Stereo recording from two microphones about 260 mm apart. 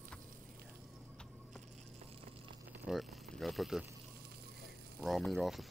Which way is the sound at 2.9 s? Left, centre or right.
Centre.